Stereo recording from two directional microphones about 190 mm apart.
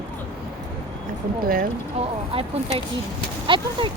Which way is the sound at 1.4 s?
50° right (ahead or behind).